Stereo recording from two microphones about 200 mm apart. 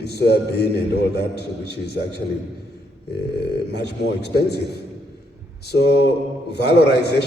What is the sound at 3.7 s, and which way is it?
Speech, 55° left (ahead or behind).